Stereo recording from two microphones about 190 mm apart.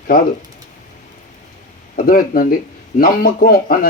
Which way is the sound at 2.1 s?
50° left (ahead or behind).